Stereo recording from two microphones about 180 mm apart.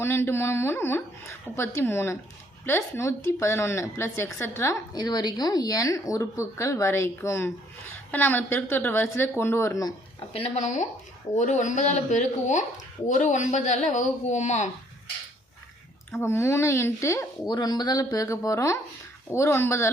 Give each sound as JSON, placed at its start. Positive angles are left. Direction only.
{"t": 0.0, "sound": "a woman's voice", "side_deg": 15}
{"t": 10.2, "sound": "speech", "side_deg": 35}
{"t": 16.1, "sound": "a woman's voice", "side_deg": 15}